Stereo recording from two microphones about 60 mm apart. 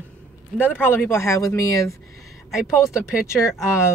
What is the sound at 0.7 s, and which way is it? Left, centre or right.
Speech, left.